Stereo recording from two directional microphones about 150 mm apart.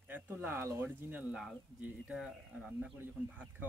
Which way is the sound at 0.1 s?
15° right (ahead or behind).